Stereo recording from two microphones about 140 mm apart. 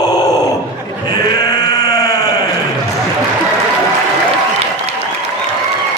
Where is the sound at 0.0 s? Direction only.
30° left (ahead or behind).